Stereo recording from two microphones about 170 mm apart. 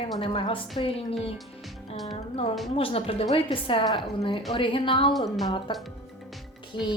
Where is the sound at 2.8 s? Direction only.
35° left (ahead or behind).